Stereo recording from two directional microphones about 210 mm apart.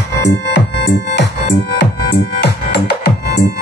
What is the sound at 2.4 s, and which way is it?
Music, 50° left (ahead or behind).